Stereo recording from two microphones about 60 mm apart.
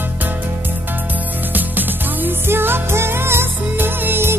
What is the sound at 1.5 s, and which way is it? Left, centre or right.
Music, right.